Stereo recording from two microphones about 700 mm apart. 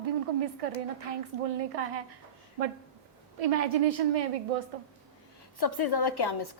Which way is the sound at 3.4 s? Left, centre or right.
Right.